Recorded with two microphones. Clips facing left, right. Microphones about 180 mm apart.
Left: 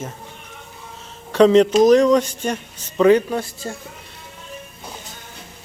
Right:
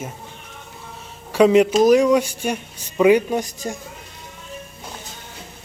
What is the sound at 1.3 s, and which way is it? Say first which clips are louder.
Speech: left 1 dB; 10° right (ahead or behind).